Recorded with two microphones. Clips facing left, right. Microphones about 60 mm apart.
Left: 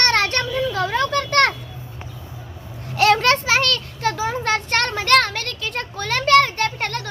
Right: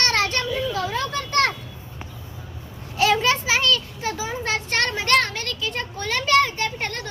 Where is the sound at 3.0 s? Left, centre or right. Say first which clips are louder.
Left 4 dB; left.